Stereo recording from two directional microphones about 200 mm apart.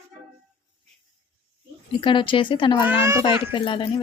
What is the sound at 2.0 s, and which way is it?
A woman's voice, 25° left (ahead or behind).